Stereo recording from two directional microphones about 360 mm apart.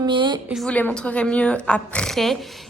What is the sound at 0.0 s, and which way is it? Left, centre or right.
Speech, centre.